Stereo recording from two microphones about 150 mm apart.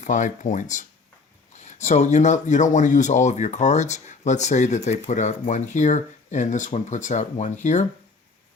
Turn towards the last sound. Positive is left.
turn(degrees=50)  # may be behind; listen again after turning